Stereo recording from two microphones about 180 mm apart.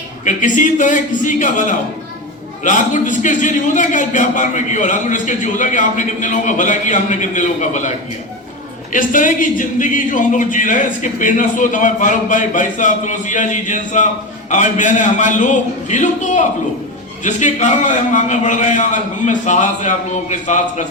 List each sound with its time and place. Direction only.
0.3 s a man's voice: 45° left (ahead or behind)